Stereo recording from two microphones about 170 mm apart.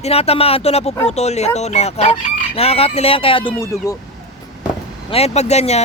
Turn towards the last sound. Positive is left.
turn(degrees=40)  # may be behind; listen again after turning